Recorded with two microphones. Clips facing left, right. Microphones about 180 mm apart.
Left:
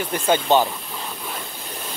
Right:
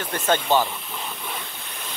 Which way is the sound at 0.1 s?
15° left (ahead or behind).